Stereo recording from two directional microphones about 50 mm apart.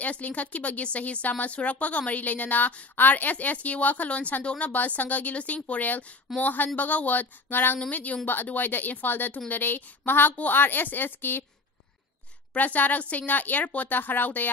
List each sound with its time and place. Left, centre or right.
0.0 s speech: left
7.9 s a woman's voice: left
12.5 s speech: left